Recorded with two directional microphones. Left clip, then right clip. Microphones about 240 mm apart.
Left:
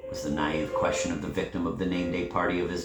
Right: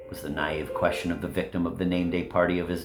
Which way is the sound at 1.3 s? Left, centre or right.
Right.